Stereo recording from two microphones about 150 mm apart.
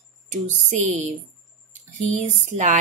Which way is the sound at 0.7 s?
50° right (ahead or behind).